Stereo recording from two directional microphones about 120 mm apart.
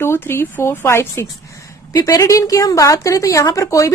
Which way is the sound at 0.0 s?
20° left (ahead or behind).